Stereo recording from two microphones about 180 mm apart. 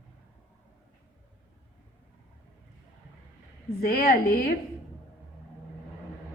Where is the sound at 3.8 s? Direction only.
55° left (ahead or behind).